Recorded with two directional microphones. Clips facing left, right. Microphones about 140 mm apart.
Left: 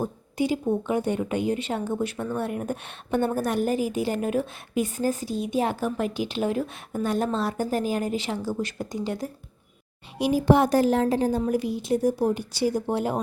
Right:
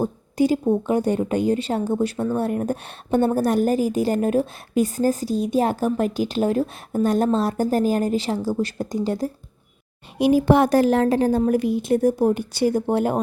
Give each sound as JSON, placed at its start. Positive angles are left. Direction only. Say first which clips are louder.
{"t": 0.0, "sound": "speech", "louder": "right 6 dB", "side_deg": -40}
{"t": 10.2, "sound": "a woman's voice", "louder": "right 4 dB", "side_deg": -60}